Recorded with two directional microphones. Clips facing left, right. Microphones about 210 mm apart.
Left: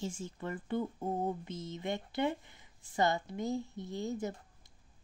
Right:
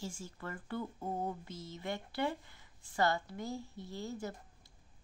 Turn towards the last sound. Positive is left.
turn(degrees=20)  # may be behind; listen again after turning